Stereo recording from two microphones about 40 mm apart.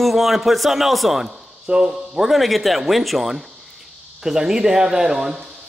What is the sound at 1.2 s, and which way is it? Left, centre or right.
Speech, centre.